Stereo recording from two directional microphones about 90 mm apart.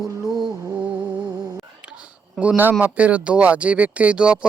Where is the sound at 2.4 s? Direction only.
20° right (ahead or behind).